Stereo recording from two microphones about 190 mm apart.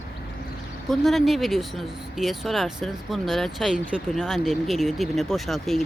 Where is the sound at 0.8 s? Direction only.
Centre (ahead or behind).